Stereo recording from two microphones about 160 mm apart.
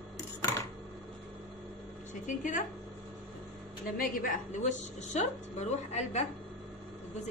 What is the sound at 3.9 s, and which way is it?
A woman's voice, 60° left (ahead or behind).